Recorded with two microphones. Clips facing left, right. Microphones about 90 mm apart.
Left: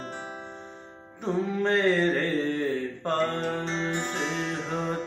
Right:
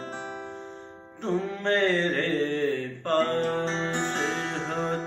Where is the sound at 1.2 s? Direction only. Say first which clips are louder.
Left 1 dB; 10° left (ahead or behind).